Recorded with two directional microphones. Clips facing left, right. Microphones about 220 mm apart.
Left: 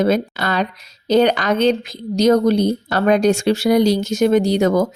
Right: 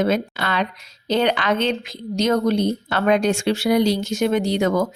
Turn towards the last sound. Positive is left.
turn(degrees=40)  # may be behind; listen again after turning